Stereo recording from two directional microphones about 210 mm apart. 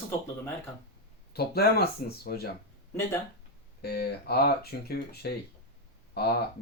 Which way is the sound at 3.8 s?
50° left (ahead or behind).